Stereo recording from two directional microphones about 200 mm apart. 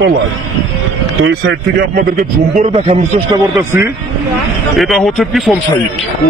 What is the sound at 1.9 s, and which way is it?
A man's voice, 40° right (ahead or behind).